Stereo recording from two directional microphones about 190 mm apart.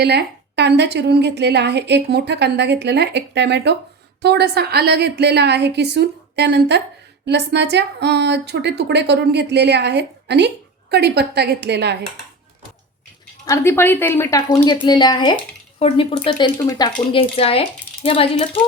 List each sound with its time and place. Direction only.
0.0 s a woman's voice: 60° right (ahead or behind)
13.4 s a woman's voice: 15° left (ahead or behind)